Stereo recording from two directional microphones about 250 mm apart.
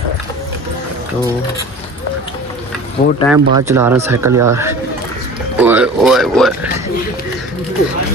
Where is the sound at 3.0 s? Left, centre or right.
Left.